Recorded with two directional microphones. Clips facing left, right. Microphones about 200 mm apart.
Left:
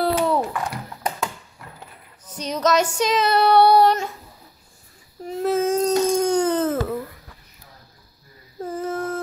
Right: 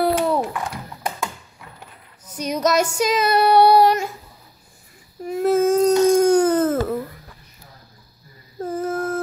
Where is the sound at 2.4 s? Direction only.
10° right (ahead or behind).